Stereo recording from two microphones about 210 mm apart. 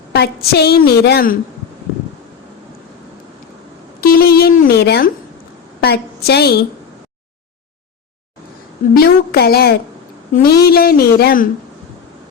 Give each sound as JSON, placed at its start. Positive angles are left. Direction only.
{"t": 0.1, "sound": "a woman's voice", "side_deg": 50}
{"t": 4.0, "sound": "a sound", "side_deg": 45}
{"t": 5.8, "sound": "a woman's voice", "side_deg": 50}
{"t": 9.0, "sound": "a woman's voice", "side_deg": 50}